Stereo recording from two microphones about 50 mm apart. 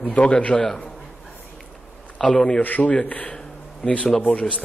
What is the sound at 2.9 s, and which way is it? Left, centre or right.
A man's voice, left.